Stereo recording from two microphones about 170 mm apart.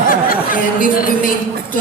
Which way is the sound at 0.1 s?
55° left (ahead or behind).